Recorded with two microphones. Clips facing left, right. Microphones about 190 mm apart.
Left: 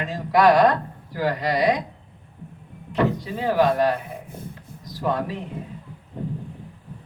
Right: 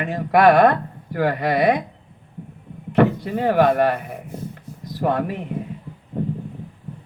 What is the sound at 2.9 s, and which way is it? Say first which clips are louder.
Speech: right 5 dB; 60° right (ahead or behind).